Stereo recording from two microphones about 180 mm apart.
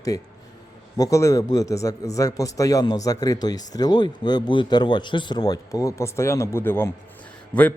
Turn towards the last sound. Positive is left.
turn(degrees=5)  # may be behind; listen again after turning